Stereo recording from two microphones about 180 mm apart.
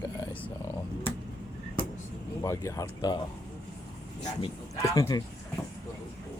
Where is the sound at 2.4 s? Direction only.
15° left (ahead or behind).